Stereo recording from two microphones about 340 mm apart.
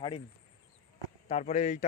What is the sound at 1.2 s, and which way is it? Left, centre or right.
Speech, centre.